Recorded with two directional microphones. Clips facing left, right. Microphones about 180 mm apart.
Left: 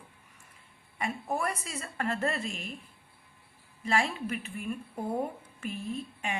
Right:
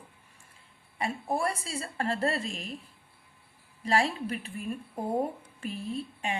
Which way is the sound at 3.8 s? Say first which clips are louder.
Right 2 dB; 35° right (ahead or behind).